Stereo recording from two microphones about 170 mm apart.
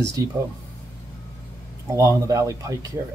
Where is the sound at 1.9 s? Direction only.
20° right (ahead or behind).